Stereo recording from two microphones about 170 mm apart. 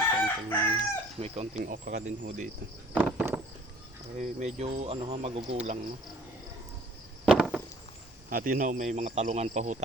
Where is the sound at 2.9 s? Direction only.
10° right (ahead or behind).